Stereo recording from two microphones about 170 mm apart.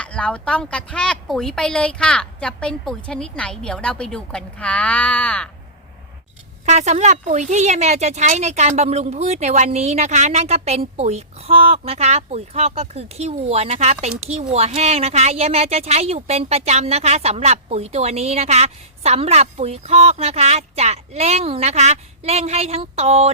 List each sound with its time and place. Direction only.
0.0 s speech: 5° left (ahead or behind)
6.7 s speech: 45° right (ahead or behind)